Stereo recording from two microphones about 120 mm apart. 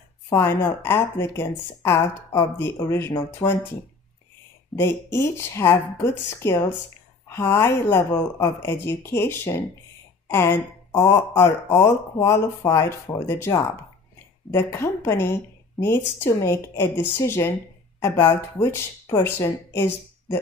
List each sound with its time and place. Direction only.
0.3 s a woman's voice: 20° left (ahead or behind)
4.7 s a woman's voice: 20° left (ahead or behind)